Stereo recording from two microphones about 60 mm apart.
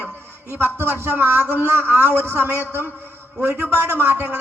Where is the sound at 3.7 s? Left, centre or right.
Right.